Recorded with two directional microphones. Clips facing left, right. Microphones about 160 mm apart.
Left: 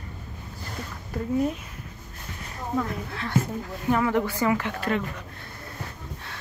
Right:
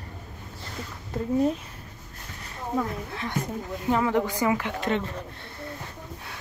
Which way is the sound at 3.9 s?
20° right (ahead or behind).